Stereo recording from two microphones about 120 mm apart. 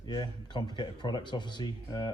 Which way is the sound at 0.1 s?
35° left (ahead or behind).